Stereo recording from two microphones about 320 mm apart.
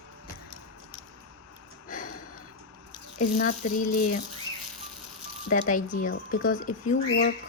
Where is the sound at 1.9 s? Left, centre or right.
Left.